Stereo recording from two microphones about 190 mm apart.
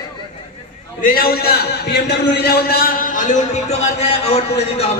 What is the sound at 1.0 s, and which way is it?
A man's voice, 50° left (ahead or behind).